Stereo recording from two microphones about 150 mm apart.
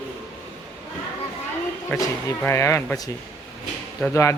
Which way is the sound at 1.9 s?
15° left (ahead or behind).